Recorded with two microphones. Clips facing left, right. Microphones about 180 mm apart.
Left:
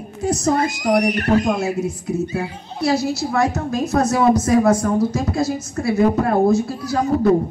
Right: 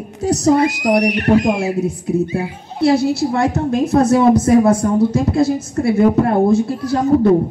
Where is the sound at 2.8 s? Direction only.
30° right (ahead or behind).